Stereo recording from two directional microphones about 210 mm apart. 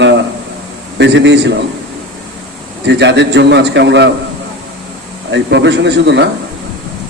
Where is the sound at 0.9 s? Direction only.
55° right (ahead or behind).